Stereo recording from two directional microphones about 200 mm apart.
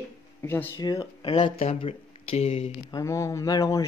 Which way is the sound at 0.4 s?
10° left (ahead or behind).